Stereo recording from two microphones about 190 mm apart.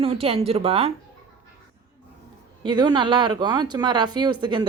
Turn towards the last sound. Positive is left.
turn(degrees=-25)  # may be behind; listen again after turning